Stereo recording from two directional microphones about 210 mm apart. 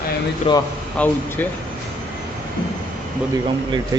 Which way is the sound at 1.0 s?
10° left (ahead or behind).